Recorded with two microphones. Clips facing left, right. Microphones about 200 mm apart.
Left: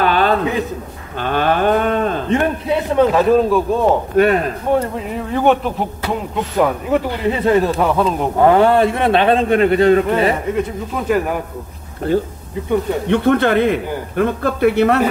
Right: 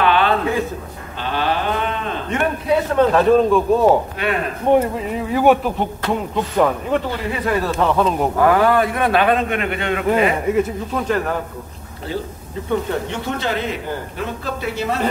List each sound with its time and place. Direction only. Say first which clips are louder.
0.0 s a sound: left 1 dB; 40° left (ahead or behind)
1.2 s a sound: left 5 dB; 50° left (ahead or behind)
3.0 s speech: left 1 dB; 5° left (ahead or behind)
4.2 s a sound: left 10 dB; 45° left (ahead or behind)
4.7 s speech: right 1 dB; centre (ahead or behind)
6.0 s speech: right 1 dB; 5° left (ahead or behind)
7.2 s a man's voice: left 6 dB; 25° left (ahead or behind)
7.9 s speech: left 1 dB; 5° left (ahead or behind)
8.4 s a man's voice: left 4 dB; 25° left (ahead or behind)
10.5 s speech: right 2 dB; 10° right (ahead or behind)
11.1 s speech: left 5 dB; 10° left (ahead or behind)
12.1 s a sound: left 9 dB; 55° left (ahead or behind)
13.1 s a man's voice: left 10 dB; 60° left (ahead or behind)